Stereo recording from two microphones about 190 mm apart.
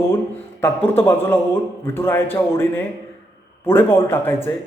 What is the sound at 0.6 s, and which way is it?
A man's voice, 10° left (ahead or behind).